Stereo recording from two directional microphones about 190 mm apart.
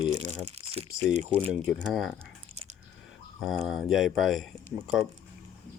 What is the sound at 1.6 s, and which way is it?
Speech, centre (ahead or behind).